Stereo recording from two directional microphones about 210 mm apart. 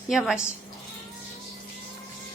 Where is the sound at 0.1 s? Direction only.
5° right (ahead or behind).